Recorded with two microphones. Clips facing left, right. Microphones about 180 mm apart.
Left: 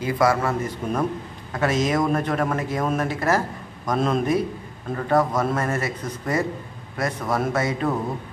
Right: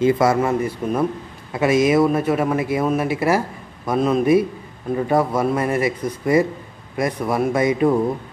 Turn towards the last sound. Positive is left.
turn(degrees=-15)  # may be behind; listen again after turning